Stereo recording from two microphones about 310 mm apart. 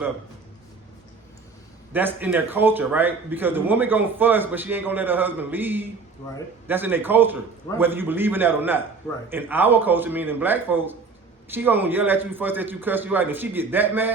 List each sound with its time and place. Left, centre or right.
1.9 s a man's voice: centre